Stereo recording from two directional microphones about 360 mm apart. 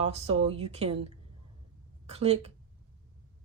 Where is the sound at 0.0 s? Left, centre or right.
Centre.